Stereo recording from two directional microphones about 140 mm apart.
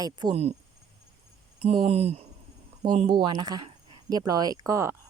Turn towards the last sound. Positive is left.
turn(degrees=-20)  # may be behind; listen again after turning